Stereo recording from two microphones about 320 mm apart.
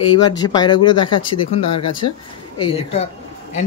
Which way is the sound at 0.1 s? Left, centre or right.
Centre.